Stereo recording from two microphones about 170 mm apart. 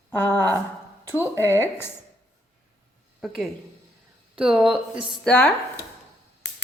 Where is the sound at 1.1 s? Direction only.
15° right (ahead or behind).